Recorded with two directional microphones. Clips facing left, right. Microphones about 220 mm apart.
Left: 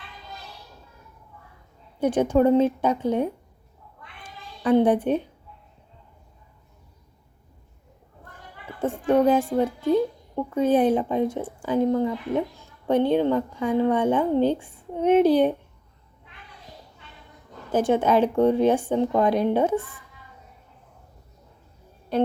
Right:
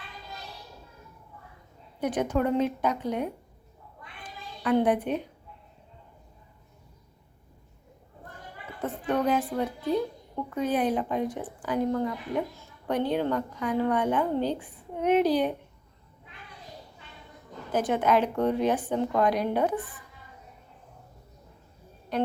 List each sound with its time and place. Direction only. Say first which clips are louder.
2.0 s speech: left 7 dB; 30° left (ahead or behind)
4.2 s child singing: left 5 dB; 25° left (ahead or behind)
8.8 s speech: left 7 dB; 30° left (ahead or behind)
17.7 s speech: left 4 dB; 30° left (ahead or behind)